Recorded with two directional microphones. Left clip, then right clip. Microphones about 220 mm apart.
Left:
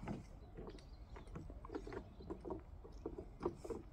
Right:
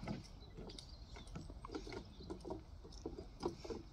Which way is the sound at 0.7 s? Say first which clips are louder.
Right 3 dB; 50° right (ahead or behind).